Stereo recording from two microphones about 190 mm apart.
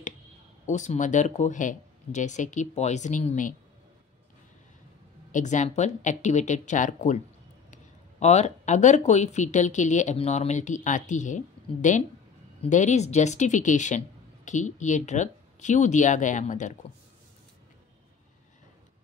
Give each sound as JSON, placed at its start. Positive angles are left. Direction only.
{"t": 0.7, "sound": "speech", "side_deg": 40}
{"t": 5.3, "sound": "speech", "side_deg": 40}